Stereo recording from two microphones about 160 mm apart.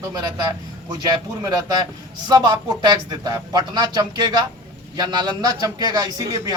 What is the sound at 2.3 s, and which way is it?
A man's voice, 25° right (ahead or behind).